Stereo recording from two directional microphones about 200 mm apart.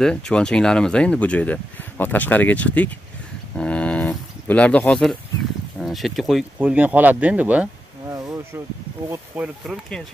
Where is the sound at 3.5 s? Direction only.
5° left (ahead or behind).